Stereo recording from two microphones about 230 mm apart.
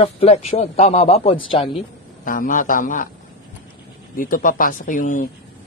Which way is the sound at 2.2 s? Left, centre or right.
Left.